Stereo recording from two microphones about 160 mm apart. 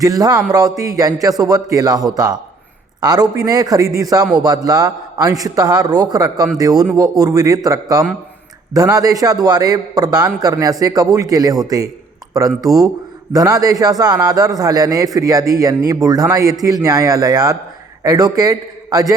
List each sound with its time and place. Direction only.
0.0 s a man's voice: 25° right (ahead or behind)